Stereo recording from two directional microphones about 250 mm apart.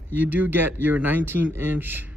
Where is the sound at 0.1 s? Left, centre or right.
Centre.